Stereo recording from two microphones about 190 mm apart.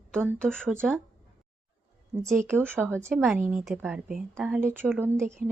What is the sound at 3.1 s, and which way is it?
Speech, centre (ahead or behind).